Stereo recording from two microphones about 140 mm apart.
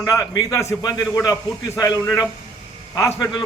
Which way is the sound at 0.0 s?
25° left (ahead or behind).